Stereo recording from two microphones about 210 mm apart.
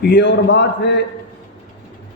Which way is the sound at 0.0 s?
55° left (ahead or behind).